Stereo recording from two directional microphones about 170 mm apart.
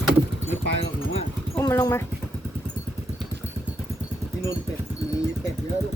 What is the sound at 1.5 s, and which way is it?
Horse, 15° left (ahead or behind).